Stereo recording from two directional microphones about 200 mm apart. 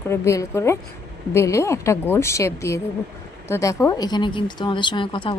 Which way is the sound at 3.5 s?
15° left (ahead or behind).